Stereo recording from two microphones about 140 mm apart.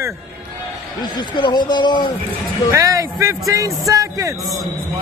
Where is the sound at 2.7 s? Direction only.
20° right (ahead or behind).